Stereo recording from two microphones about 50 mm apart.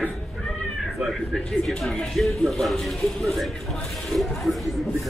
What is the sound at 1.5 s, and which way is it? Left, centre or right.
Speech, centre.